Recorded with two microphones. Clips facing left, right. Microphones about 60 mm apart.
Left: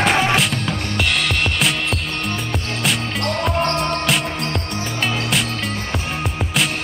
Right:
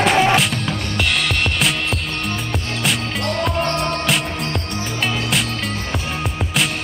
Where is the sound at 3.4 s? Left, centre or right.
Centre.